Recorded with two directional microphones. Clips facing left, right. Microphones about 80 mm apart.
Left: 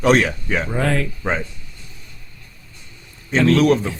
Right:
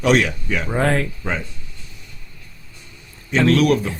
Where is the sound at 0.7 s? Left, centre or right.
Right.